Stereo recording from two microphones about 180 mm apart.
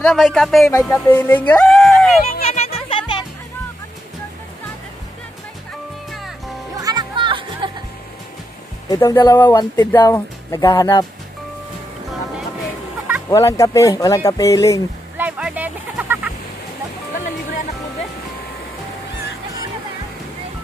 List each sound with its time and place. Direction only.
0.0 s speech: centre (ahead or behind)
0.8 s speech: 10° left (ahead or behind)
2.4 s music: 35° left (ahead or behind)
6.8 s music: 20° right (ahead or behind)
8.8 s speech: 20° left (ahead or behind)
13.3 s speech: 15° left (ahead or behind)
15.1 s a sound: 5° right (ahead or behind)